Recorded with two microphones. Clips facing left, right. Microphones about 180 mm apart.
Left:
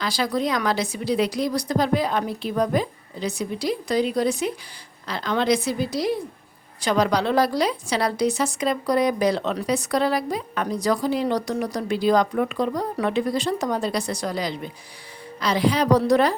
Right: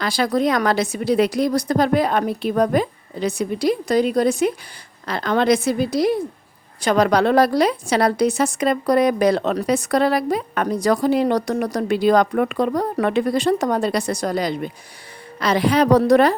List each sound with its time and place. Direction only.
0.0 s a woman's voice: 55° right (ahead or behind)
14.1 s a woman's voice: 50° right (ahead or behind)